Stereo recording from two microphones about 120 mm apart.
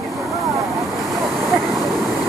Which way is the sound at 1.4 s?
25° right (ahead or behind).